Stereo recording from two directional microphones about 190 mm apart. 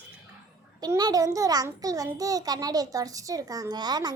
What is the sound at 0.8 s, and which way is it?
A child's voice, 20° right (ahead or behind).